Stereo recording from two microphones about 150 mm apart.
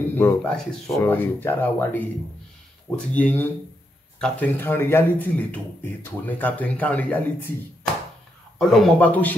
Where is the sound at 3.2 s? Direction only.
10° left (ahead or behind).